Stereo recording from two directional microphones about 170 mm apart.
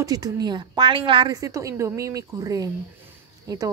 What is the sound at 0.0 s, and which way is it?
A woman's voice, 20° right (ahead or behind).